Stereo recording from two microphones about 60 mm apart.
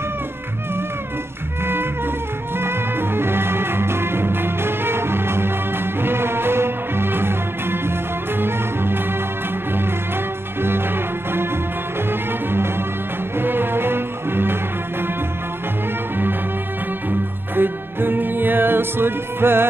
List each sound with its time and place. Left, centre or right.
2.5 s music: right
10.6 s music: right
12.1 s music: right
17.1 s music: right